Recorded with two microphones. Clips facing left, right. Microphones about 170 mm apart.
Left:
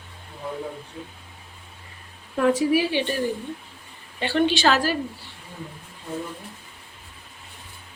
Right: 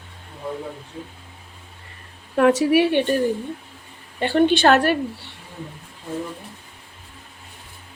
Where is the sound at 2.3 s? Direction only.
75° right (ahead or behind).